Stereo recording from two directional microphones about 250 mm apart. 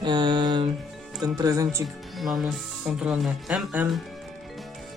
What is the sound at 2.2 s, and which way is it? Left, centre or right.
Speech, centre.